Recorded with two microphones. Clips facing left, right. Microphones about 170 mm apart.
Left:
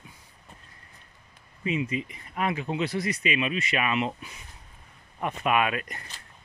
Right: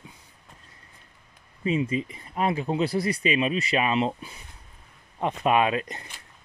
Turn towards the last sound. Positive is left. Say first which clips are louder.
# right 3 dB
turn(degrees=-25)  # may be behind; listen again after turning